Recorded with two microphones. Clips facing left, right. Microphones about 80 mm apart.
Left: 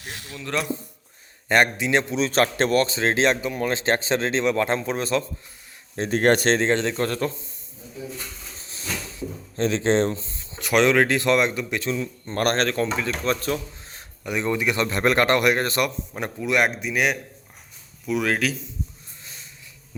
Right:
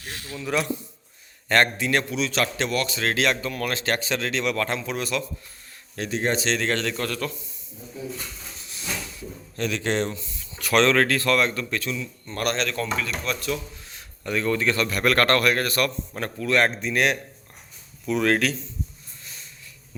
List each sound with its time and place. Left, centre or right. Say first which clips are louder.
0.0 s speech: right 1 dB; centre
0.3 s speech: right 2 dB; centre
1.5 s a man's voice: left 1 dB; centre
6.1 s speech: left 6 dB; left
6.6 s a man's voice: left 4 dB; left
8.5 s a sound: left 1 dB; left
10.8 s a man's voice: left 1 dB; centre
11.9 s speech: left 4 dB; left
14.3 s a man's voice: even; centre